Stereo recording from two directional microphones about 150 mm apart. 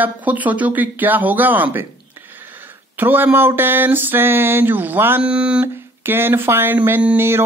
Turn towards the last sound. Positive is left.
turn(degrees=-15)  # may be behind; listen again after turning